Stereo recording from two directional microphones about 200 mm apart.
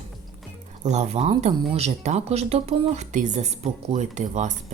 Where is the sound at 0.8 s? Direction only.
35° right (ahead or behind).